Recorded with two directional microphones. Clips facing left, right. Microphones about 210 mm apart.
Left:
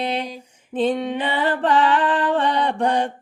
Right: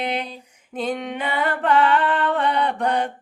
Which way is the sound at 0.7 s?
25° left (ahead or behind).